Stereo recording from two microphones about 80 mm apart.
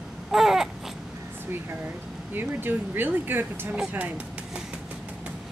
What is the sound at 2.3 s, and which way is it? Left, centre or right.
Speech, right.